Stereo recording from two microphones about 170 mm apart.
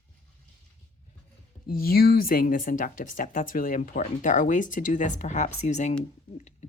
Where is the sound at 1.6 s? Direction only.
60° left (ahead or behind).